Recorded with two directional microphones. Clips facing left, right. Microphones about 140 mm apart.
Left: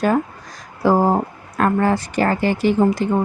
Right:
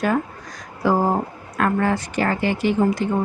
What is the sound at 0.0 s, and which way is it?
Speech, 30° left (ahead or behind).